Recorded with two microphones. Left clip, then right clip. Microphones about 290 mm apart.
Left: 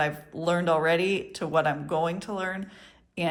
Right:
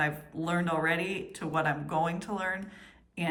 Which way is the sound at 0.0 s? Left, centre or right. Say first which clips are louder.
Left 4 dB; centre.